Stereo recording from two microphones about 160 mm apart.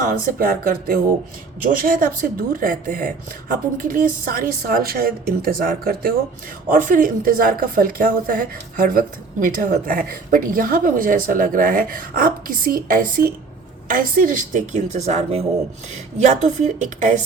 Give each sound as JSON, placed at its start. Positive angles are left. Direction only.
{"t": 0.0, "sound": "a woman's voice", "side_deg": -60}